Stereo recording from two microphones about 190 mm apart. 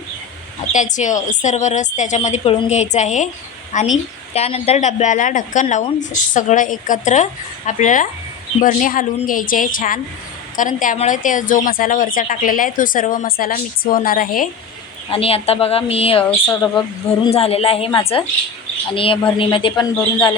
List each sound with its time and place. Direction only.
0.7 s a woman's voice: 40° left (ahead or behind)
15.1 s speech: 30° left (ahead or behind)
16.2 s speech: 15° left (ahead or behind)
17.2 s a woman's voice: 30° left (ahead or behind)